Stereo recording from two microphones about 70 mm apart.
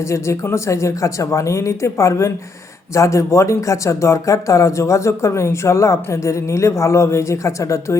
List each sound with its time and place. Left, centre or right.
0.0 s speech: left